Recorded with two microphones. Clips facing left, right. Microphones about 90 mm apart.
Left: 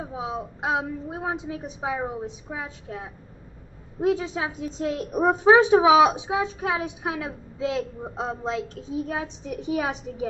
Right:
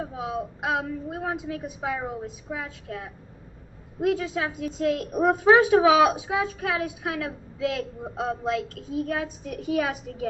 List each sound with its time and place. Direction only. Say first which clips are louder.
0.0 s a woman's voice: right 1 dB; 20° left (ahead or behind)